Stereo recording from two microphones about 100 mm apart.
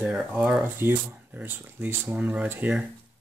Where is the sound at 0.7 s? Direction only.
20° right (ahead or behind).